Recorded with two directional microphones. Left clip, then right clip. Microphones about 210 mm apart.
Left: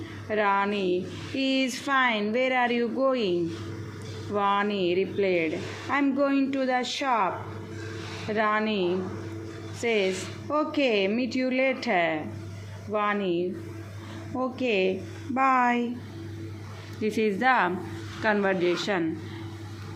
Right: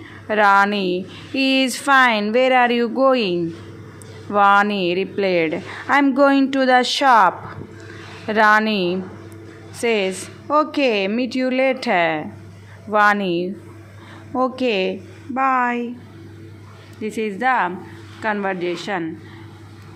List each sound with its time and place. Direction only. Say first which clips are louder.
0.3 s a woman's voice: right 10 dB; 30° right (ahead or behind)
17.0 s speech: right 3 dB; 5° right (ahead or behind)